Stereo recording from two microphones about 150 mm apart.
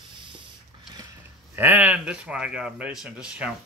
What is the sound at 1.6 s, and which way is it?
Speech, 15° right (ahead or behind).